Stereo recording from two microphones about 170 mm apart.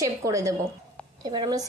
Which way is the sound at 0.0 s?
20° right (ahead or behind).